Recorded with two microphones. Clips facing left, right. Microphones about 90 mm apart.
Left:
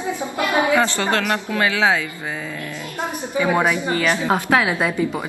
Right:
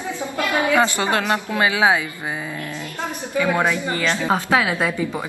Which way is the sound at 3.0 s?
20° left (ahead or behind).